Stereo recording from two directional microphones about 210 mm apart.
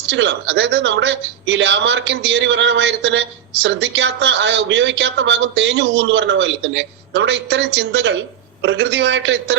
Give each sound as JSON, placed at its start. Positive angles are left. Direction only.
{"t": 0.1, "sound": "a woman's voice", "side_deg": -60}